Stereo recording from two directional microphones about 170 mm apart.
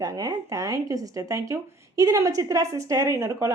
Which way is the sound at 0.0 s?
20° right (ahead or behind).